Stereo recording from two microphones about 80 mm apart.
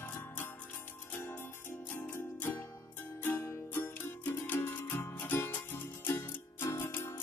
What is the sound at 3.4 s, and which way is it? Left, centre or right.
Music, left.